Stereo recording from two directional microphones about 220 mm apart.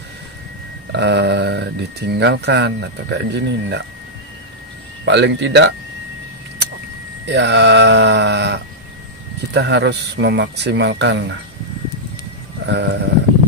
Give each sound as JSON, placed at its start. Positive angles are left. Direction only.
{"t": 0.9, "sound": "speech", "side_deg": -50}
{"t": 5.0, "sound": "speech", "side_deg": -50}
{"t": 7.2, "sound": "speech", "side_deg": -50}
{"t": 12.6, "sound": "speech", "side_deg": -50}